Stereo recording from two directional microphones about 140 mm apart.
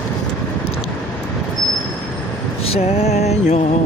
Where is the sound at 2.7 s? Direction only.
50° left (ahead or behind).